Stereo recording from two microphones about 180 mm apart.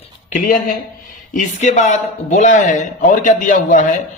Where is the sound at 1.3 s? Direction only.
45° left (ahead or behind).